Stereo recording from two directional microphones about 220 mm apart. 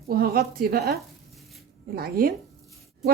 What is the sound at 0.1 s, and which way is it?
Speech, 45° right (ahead or behind).